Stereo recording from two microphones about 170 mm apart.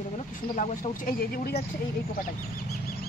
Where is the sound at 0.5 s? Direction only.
55° left (ahead or behind).